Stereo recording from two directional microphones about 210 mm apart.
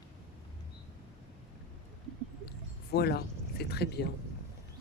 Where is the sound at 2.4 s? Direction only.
50° left (ahead or behind).